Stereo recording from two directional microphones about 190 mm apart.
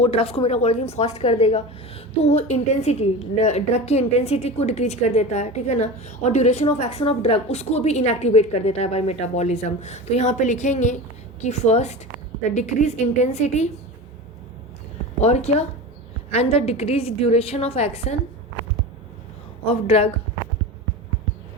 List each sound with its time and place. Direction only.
0.0 s a woman's voice: 30° left (ahead or behind)
15.2 s a woman's voice: 35° left (ahead or behind)
19.6 s a woman's voice: 30° left (ahead or behind)